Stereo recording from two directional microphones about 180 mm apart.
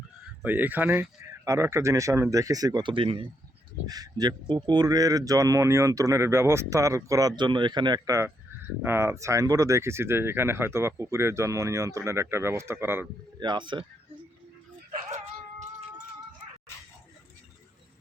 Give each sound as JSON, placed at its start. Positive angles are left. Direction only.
{"t": 0.4, "sound": "speech", "side_deg": -10}
{"t": 13.4, "sound": "speech", "side_deg": -25}